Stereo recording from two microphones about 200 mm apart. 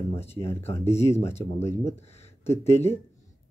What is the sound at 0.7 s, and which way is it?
Speech, 15° left (ahead or behind).